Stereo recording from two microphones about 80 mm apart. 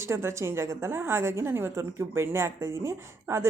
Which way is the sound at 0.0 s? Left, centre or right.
Right.